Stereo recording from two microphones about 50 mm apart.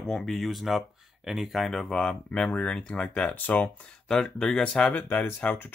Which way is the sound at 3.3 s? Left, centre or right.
Left.